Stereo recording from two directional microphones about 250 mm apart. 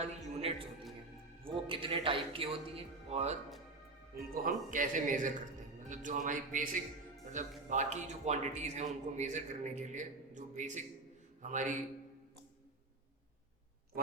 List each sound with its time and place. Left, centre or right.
0.0 s a man's voice: right
4.1 s a man's voice: right